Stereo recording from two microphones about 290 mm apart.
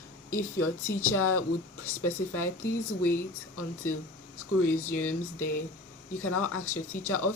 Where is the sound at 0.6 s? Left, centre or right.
Left.